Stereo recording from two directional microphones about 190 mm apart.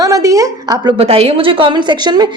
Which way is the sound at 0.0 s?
15° right (ahead or behind).